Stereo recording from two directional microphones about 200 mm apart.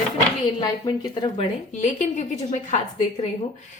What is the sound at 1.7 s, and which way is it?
A woman's voice, 35° left (ahead or behind).